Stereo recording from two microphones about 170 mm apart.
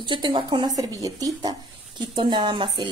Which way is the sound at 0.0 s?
25° right (ahead or behind).